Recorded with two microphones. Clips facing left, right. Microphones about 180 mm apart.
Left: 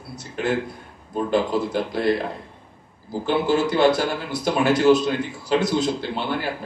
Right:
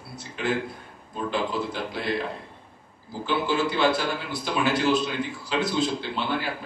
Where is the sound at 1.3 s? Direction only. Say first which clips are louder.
Left 5 dB; 40° left (ahead or behind).